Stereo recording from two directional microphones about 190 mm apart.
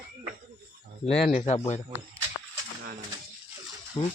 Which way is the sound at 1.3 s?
35° left (ahead or behind).